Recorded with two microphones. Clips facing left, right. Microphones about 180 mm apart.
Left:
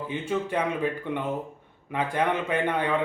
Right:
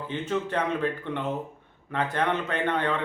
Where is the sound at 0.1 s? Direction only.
10° left (ahead or behind).